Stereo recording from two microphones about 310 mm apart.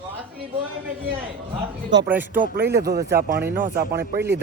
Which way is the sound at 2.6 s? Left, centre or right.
Centre.